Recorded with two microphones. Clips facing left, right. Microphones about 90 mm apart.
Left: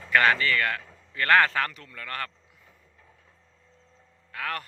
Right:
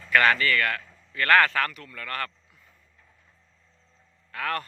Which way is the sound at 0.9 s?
20° left (ahead or behind).